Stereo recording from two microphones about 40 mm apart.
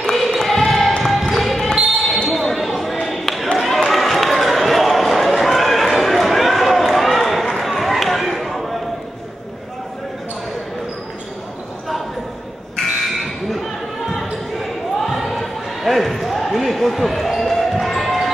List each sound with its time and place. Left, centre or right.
0.1 s a sound: centre
1.0 s basketball bounce: centre
2.2 s ping: centre
3.5 s a sound: centre
13.0 s crow: centre
14.1 s basketball bounce: centre